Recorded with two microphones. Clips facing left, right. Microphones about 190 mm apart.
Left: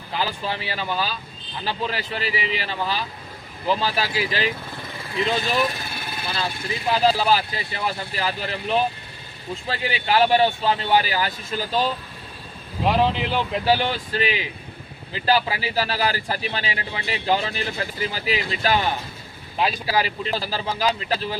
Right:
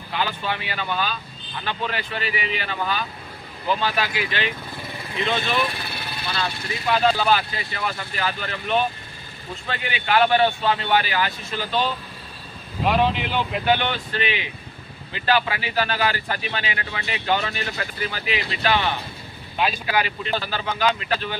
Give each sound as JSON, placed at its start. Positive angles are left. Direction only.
{"t": 0.4, "sound": "speech", "side_deg": 35}